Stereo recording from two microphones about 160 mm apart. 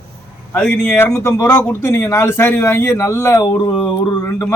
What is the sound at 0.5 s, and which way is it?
A man's voice, 10° left (ahead or behind).